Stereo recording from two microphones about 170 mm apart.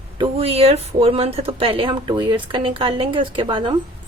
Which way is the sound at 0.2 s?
35° right (ahead or behind).